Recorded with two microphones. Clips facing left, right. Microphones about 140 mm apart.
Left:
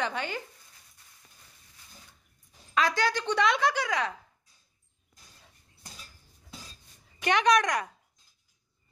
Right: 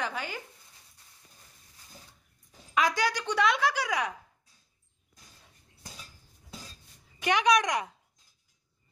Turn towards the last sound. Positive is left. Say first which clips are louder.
# left 1 dB
turn(degrees=-15)  # may be behind; listen again after turning